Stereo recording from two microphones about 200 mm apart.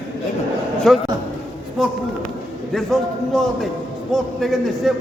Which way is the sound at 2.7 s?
Centre (ahead or behind).